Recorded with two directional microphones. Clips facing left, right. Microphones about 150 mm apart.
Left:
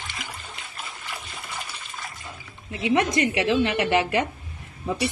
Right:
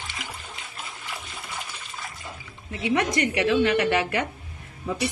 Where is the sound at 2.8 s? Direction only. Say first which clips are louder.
Left 2 dB; 20° left (ahead or behind).